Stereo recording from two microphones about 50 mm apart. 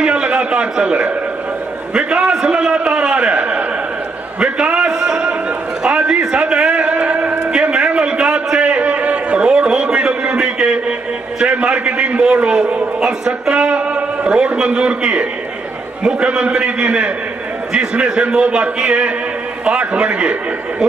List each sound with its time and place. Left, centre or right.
0.0 s a man's voice: right
4.4 s a sound: centre
13.0 s a man's voice: centre